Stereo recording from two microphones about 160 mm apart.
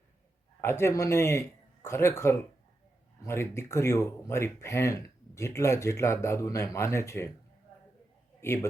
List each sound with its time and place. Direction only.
0.6 s a man's voice: 15° left (ahead or behind)
8.4 s a man's voice: 15° left (ahead or behind)